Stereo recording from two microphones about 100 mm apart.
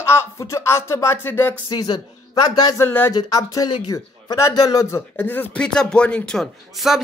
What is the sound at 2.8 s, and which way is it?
Speech, 20° left (ahead or behind).